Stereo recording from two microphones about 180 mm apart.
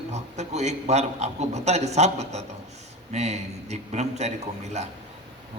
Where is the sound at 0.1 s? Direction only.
40° right (ahead or behind).